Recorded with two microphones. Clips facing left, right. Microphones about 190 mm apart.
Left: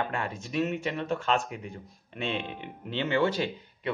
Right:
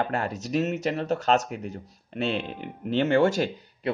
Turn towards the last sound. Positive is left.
turn(degrees=-45)  # may be behind; listen again after turning